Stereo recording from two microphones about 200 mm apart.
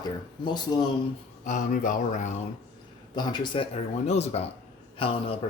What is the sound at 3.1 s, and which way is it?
Speech, 20° left (ahead or behind).